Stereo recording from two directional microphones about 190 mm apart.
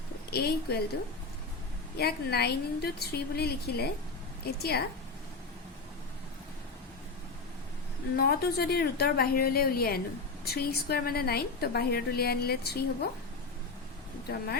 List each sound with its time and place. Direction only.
0.3 s a woman's voice: 55° left (ahead or behind)
2.0 s a woman's voice: 55° left (ahead or behind)
8.1 s a woman's voice: 55° left (ahead or behind)
14.3 s a woman's voice: 60° left (ahead or behind)